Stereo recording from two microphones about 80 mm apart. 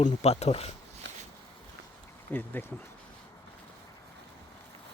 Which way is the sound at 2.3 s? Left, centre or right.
Left.